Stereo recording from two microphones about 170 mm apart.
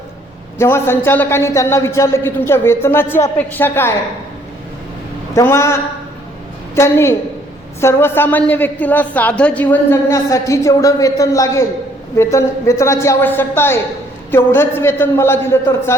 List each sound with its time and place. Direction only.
0.6 s a woman's voice: 15° left (ahead or behind)
5.3 s a woman's voice: 15° left (ahead or behind)